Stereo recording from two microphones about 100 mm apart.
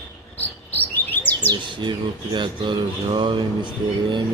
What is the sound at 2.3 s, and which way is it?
Speech, 50° right (ahead or behind).